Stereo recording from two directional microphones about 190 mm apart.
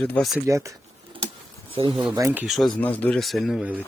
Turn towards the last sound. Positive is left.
turn(degrees=-5)  # may be behind; listen again after turning